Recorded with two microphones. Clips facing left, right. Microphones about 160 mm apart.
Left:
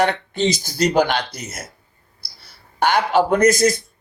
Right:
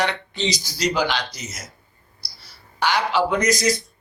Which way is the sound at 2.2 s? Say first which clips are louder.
Even; 55° left (ahead or behind).